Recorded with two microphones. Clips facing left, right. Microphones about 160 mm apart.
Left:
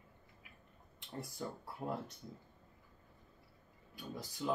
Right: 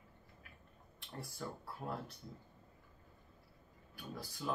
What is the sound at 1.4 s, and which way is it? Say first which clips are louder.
Speech: left 1 dB; 20° left (ahead or behind).